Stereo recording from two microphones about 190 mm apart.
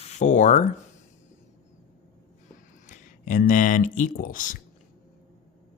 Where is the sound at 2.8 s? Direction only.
40° left (ahead or behind).